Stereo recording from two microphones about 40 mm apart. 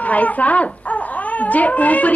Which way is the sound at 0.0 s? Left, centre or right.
Left.